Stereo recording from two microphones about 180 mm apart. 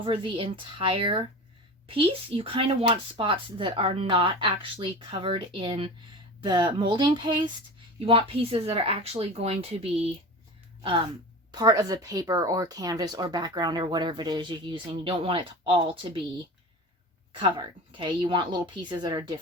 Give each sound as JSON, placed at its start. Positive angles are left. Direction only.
{"t": 0.0, "sound": "speech", "side_deg": -30}
{"t": 10.8, "sound": "a sound", "side_deg": -25}
{"t": 11.5, "sound": "speech", "side_deg": -20}
{"t": 17.4, "sound": "speech", "side_deg": -25}